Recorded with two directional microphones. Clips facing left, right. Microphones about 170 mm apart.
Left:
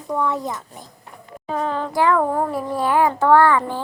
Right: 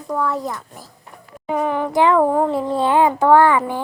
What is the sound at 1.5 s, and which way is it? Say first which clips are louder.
A child's voice: right 3 dB; 15° right (ahead or behind).